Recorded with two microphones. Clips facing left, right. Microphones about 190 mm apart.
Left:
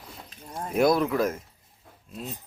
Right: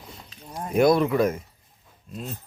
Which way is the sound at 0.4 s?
Centre (ahead or behind).